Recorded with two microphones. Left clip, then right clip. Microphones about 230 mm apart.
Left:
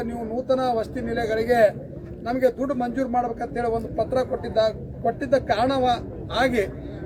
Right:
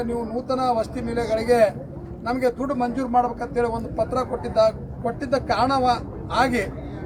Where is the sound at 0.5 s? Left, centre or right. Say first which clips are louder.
Right 1 dB; centre.